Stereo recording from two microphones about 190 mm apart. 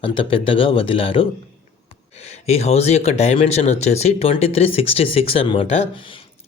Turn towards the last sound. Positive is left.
turn(degrees=30)  # may be behind; listen again after turning